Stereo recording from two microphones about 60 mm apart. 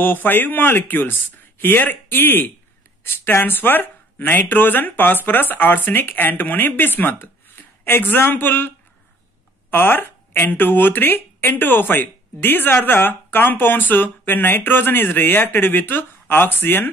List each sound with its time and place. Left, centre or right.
0.0 s speech: left